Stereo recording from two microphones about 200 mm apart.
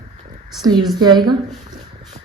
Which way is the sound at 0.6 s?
20° right (ahead or behind).